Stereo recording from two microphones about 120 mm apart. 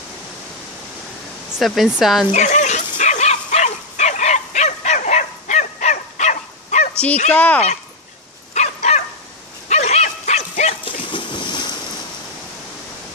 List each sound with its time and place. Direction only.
1.5 s speech: 5° right (ahead or behind)
2.3 s dog: 85° left
7.3 s speech: 10° left (ahead or behind)
8.5 s dog: 70° left (ahead or behind)
10.9 s splash: 45° left (ahead or behind)